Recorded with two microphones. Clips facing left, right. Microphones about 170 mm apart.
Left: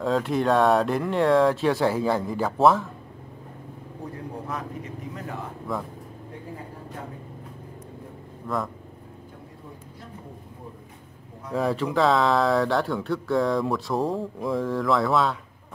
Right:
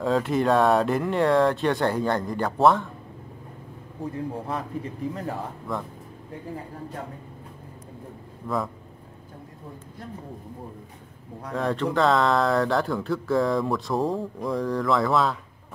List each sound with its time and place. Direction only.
0.0 s speech: centre (ahead or behind)
4.5 s speech: 30° right (ahead or behind)
5.7 s speech: centre (ahead or behind)
8.5 s speech: centre (ahead or behind)
11.5 s speech: 5° left (ahead or behind)